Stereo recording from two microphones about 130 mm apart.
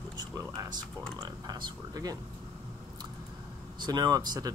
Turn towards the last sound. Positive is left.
turn(degrees=-30)  # may be behind; listen again after turning